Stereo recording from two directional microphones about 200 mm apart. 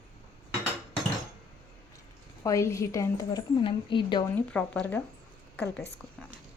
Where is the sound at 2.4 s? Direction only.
15° left (ahead or behind).